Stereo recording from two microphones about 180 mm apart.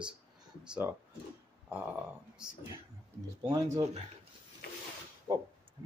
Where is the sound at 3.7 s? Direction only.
35° right (ahead or behind).